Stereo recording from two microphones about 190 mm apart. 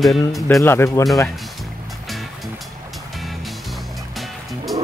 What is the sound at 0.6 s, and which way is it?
Speech, 15° left (ahead or behind).